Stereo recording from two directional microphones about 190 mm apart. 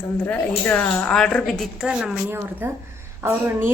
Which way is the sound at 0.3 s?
10° left (ahead or behind).